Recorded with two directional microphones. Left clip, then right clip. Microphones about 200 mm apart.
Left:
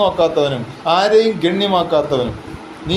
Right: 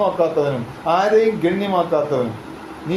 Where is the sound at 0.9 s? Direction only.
35° left (ahead or behind).